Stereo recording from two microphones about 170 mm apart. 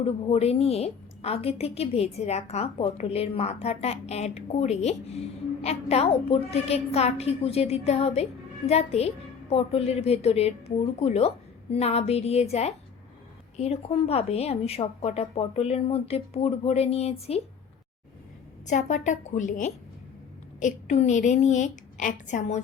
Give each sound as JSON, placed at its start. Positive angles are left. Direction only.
{"t": 0.0, "sound": "a woman's voice", "side_deg": 35}
{"t": 18.6, "sound": "a woman's voice", "side_deg": 45}